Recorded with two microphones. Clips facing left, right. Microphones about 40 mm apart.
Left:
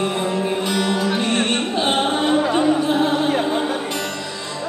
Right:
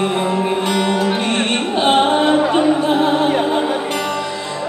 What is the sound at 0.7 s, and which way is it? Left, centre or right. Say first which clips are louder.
Music: right 3 dB; centre.